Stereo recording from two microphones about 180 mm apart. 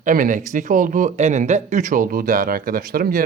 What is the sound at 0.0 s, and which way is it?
Speech, 45° right (ahead or behind).